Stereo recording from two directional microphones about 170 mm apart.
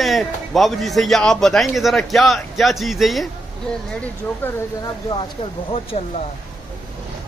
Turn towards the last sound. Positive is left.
turn(degrees=40)  # may be behind; listen again after turning